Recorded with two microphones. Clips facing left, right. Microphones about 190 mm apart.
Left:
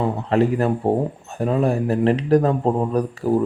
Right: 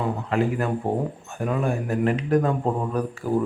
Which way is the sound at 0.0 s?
35° left (ahead or behind).